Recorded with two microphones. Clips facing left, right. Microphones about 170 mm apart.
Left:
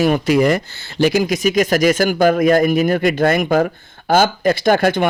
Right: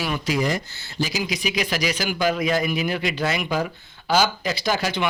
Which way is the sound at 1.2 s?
45° left (ahead or behind).